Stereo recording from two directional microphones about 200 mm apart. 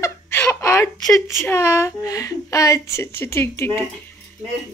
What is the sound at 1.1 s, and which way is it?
Speech, 15° left (ahead or behind).